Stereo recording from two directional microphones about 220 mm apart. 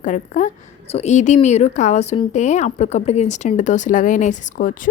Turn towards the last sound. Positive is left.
turn(degrees=35)  # may be behind; listen again after turning